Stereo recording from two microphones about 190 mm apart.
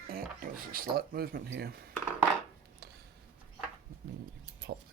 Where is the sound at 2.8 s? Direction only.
55° right (ahead or behind).